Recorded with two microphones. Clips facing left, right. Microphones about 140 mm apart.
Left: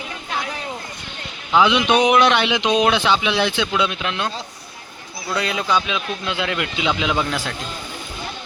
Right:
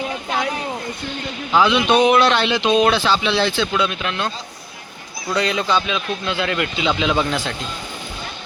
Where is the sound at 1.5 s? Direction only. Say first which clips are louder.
Right 1 dB; 15° left (ahead or behind).